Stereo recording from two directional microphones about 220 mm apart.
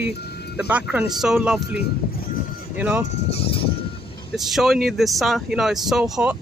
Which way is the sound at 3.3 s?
25° left (ahead or behind).